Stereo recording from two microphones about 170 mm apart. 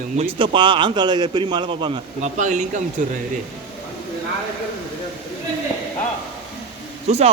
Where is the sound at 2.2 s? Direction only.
45° right (ahead or behind).